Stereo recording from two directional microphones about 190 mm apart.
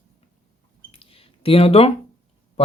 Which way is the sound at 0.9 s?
30° left (ahead or behind).